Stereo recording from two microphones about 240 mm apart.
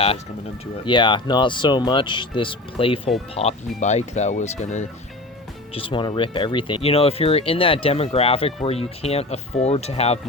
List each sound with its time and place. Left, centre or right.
0.9 s speech: centre